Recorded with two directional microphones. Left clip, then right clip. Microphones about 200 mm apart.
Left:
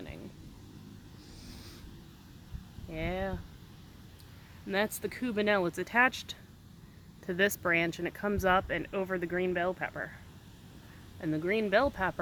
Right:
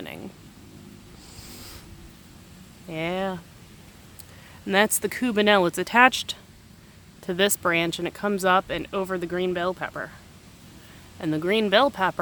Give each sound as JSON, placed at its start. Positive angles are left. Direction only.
{"t": 2.9, "sound": "speech", "side_deg": -30}
{"t": 4.7, "sound": "speech", "side_deg": -30}
{"t": 7.3, "sound": "speech", "side_deg": -15}
{"t": 11.2, "sound": "speech", "side_deg": -30}